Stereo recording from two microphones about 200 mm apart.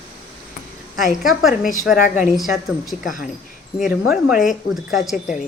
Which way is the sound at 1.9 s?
40° left (ahead or behind).